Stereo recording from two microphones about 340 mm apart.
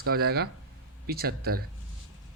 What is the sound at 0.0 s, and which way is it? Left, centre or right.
Speech, right.